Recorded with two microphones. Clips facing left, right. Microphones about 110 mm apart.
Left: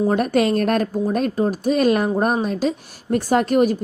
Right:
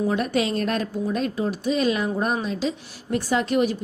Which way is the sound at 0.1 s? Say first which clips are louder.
Left 5 dB; 45° left (ahead or behind).